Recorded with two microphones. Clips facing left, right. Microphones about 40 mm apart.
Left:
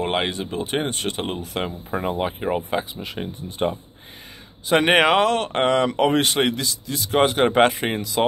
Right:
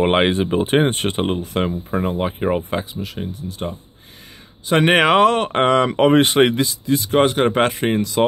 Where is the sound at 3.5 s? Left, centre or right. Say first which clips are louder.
Left 8 dB; left.